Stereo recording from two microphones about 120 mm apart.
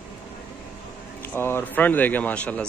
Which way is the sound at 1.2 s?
20° left (ahead or behind).